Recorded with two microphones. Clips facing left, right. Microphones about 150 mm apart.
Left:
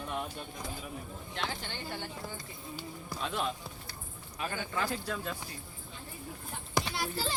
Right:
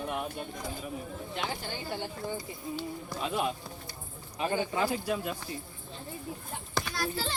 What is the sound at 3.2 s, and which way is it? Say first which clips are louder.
Speech: right 4 dB; 10° right (ahead or behind).